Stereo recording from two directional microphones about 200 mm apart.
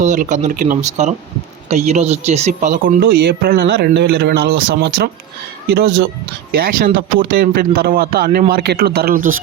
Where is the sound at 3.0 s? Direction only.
60° right (ahead or behind).